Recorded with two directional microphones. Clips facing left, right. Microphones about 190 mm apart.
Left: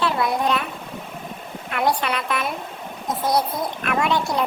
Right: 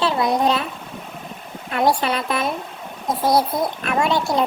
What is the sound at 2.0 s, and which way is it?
Speech, 30° right (ahead or behind).